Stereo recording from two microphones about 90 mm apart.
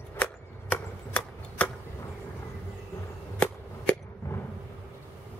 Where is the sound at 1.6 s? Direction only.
15° left (ahead or behind).